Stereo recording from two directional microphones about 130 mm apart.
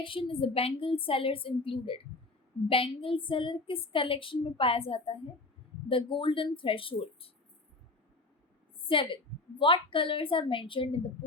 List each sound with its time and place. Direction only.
0.0 s a woman's voice: 40° left (ahead or behind)
8.9 s a woman's voice: 45° left (ahead or behind)